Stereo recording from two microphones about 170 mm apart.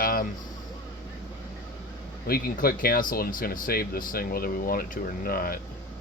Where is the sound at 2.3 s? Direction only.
60° left (ahead or behind).